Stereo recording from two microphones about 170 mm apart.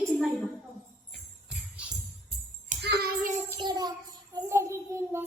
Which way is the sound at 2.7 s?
50° right (ahead or behind).